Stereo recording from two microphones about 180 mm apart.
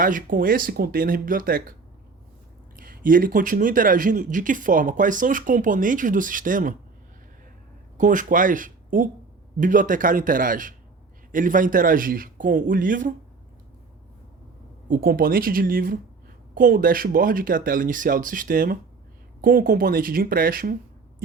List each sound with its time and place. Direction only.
0.0 s speech: 50° right (ahead or behind)
2.7 s speech: 50° right (ahead or behind)
7.9 s speech: 45° right (ahead or behind)
14.8 s speech: 50° right (ahead or behind)